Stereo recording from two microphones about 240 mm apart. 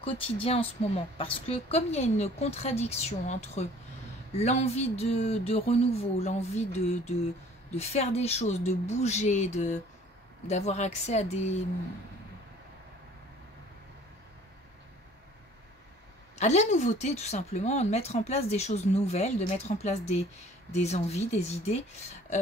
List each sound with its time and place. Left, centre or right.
0.0 s speech: left
16.3 s speech: left